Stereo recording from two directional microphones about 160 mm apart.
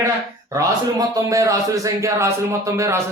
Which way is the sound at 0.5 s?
20° right (ahead or behind).